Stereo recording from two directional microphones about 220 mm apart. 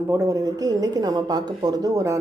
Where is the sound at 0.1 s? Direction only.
15° right (ahead or behind).